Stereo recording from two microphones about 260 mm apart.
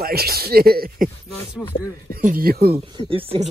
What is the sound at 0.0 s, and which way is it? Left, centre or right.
Speech, right.